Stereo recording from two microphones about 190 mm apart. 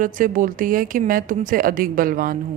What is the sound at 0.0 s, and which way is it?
A woman's voice, 45° right (ahead or behind).